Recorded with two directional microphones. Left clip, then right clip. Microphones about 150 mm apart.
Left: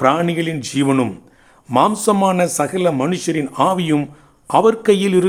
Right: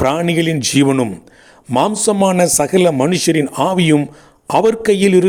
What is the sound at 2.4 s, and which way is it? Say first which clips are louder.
A man's voice: right 4 dB; 35° right (ahead or behind).